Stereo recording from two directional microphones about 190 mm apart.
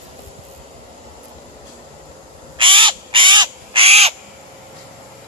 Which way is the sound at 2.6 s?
25° right (ahead or behind).